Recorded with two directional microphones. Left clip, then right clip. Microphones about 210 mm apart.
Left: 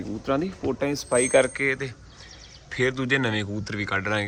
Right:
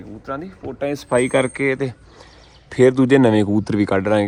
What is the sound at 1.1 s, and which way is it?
Speech, 40° right (ahead or behind).